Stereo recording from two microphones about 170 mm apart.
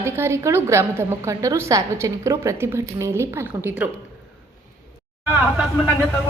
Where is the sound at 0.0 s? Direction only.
15° right (ahead or behind).